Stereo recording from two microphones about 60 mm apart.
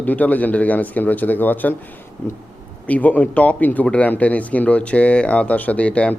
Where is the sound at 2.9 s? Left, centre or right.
Left.